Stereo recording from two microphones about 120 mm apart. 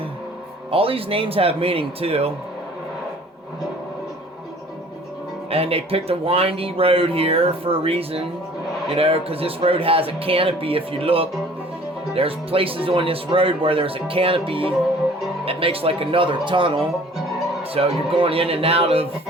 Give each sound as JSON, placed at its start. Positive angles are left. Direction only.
{"t": 0.7, "sound": "speech", "side_deg": -50}
{"t": 5.5, "sound": "speech", "side_deg": -55}